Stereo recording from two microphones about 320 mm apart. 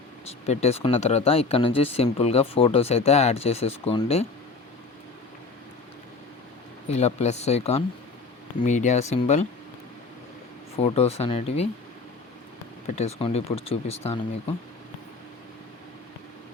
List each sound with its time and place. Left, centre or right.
0.3 s speech: centre
6.8 s speech: centre
10.8 s speech: centre
13.0 s speech: centre